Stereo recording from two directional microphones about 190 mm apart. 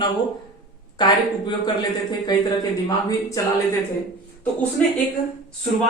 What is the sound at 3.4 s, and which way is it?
Speech, 15° left (ahead or behind).